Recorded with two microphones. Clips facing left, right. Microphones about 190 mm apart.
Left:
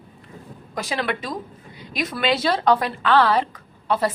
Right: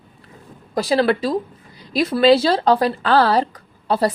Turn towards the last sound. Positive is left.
turn(degrees=-35)  # may be behind; listen again after turning